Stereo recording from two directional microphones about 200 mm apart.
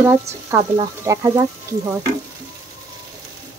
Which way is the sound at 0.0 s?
10° right (ahead or behind).